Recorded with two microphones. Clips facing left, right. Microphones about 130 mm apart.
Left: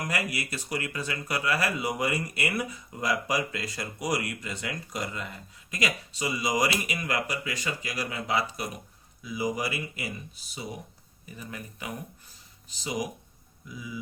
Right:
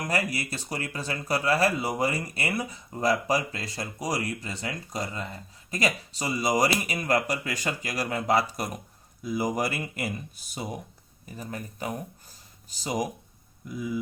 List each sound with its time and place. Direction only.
0.1 s speech: 30° right (ahead or behind); by 14.0 s 50° right (ahead or behind)